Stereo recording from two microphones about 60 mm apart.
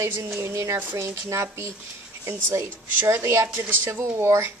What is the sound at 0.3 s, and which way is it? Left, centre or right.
Speech, right.